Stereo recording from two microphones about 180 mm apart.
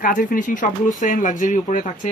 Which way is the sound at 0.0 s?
50° left (ahead or behind).